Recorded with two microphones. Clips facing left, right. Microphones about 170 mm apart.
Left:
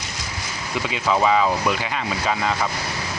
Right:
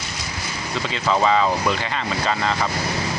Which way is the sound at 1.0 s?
5° left (ahead or behind).